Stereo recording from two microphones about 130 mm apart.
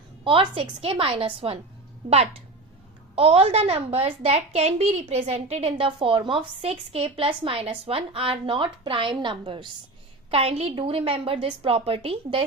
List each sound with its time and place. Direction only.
0.3 s a woman's voice: 40° right (ahead or behind)
5.7 s a woman's voice: 40° right (ahead or behind)
10.3 s a woman's voice: 50° right (ahead or behind)